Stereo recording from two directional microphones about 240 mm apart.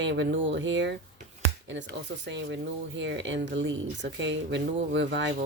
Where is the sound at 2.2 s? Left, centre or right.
Right.